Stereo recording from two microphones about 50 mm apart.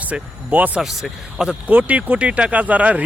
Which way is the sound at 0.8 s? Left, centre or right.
Centre.